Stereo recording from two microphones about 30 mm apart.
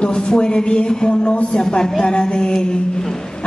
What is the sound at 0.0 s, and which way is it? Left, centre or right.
A woman's voice, left.